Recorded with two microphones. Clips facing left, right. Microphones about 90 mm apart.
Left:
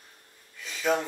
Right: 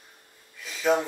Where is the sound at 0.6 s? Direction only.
5° right (ahead or behind).